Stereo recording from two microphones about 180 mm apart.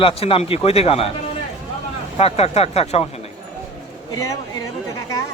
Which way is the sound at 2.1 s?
35° left (ahead or behind).